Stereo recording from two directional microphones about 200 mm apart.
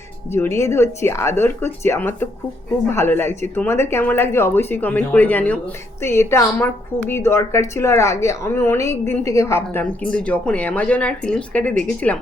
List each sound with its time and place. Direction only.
0.3 s a woman's voice: 15° left (ahead or behind)